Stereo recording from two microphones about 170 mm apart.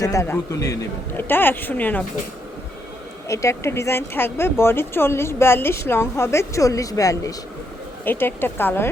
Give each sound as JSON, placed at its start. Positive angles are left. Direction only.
{"t": 0.0, "sound": "speech", "side_deg": 20}
{"t": 3.2, "sound": "speech", "side_deg": 15}